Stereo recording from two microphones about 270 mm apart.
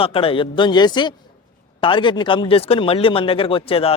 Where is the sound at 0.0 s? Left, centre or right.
Centre.